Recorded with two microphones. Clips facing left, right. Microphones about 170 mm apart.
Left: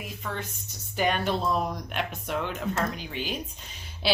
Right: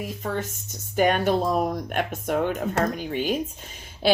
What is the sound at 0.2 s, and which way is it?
Speech, 40° right (ahead or behind).